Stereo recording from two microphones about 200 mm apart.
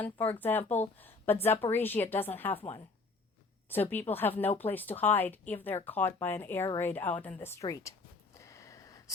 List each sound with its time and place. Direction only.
0.0 s a woman's voice: 10° left (ahead or behind)
3.7 s a woman's voice: 10° left (ahead or behind)
8.4 s a sound: 15° left (ahead or behind)